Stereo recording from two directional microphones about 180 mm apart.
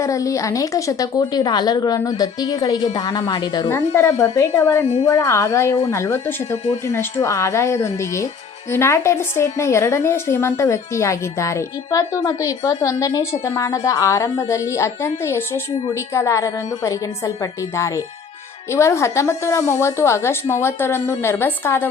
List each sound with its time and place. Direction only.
0.0 s a woman's voice: 20° left (ahead or behind)